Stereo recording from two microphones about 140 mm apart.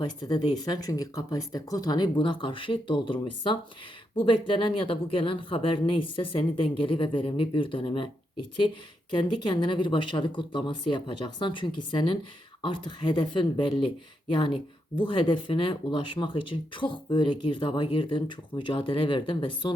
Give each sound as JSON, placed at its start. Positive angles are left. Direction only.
{"t": 0.0, "sound": "speech", "side_deg": 30}
{"t": 9.1, "sound": "speech", "side_deg": 35}